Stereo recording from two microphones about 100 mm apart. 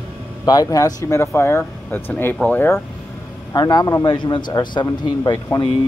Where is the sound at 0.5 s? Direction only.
40° left (ahead or behind); by 2.8 s 20° left (ahead or behind).